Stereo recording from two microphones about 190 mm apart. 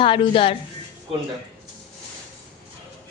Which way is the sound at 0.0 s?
25° left (ahead or behind).